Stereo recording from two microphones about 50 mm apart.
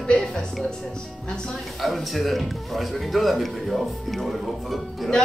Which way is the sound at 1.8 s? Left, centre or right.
Centre.